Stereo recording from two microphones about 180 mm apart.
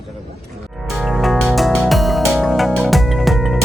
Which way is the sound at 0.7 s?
Centre (ahead or behind).